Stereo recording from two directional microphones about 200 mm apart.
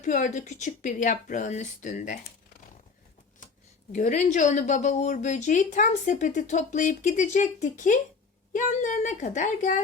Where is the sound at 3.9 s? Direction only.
40° left (ahead or behind).